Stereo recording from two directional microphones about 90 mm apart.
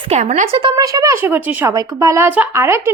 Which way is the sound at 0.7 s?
40° right (ahead or behind).